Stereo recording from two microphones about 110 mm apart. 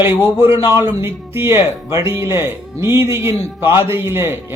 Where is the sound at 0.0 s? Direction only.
20° right (ahead or behind).